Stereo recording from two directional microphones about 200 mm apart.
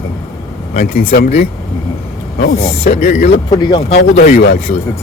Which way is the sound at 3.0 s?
40° left (ahead or behind).